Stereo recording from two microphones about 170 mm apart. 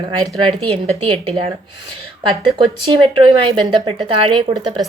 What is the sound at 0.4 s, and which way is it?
Speech, 30° right (ahead or behind).